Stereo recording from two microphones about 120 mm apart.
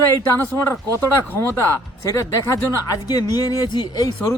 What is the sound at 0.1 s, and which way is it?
Speech, 20° left (ahead or behind).